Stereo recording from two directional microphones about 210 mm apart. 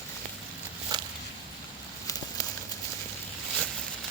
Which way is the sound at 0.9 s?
20° right (ahead or behind).